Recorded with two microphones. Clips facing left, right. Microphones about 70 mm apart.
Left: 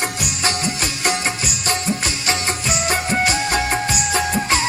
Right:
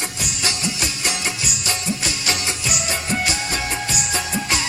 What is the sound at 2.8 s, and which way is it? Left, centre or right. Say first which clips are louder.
Music: left 5 dB; left.